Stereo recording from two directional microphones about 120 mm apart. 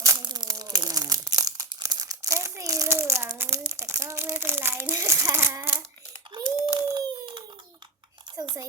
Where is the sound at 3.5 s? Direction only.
25° right (ahead or behind).